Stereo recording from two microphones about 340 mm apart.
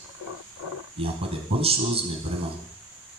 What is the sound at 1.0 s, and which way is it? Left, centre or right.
A man's voice, centre.